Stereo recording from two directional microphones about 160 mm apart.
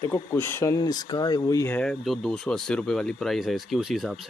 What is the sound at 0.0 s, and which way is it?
Speech, 15° left (ahead or behind).